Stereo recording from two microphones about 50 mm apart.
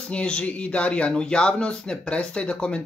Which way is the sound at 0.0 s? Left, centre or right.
Centre.